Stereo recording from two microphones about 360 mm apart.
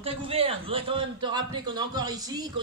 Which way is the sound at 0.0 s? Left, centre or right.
Centre.